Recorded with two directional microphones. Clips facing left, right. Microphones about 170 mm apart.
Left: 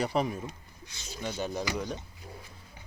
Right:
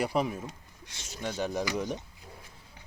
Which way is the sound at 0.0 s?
5° right (ahead or behind).